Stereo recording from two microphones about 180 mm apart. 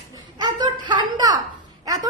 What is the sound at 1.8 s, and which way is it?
Dog, 20° right (ahead or behind).